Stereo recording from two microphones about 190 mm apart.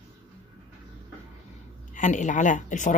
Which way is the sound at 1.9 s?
40° left (ahead or behind).